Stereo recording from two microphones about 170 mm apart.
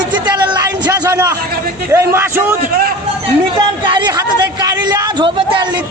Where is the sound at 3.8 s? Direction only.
25° right (ahead or behind).